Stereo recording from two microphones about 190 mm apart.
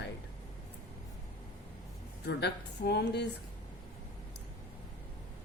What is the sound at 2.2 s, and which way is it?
A woman's voice, 60° left (ahead or behind).